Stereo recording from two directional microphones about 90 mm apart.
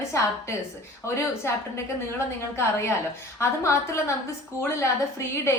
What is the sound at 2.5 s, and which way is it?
A woman's voice, 30° left (ahead or behind).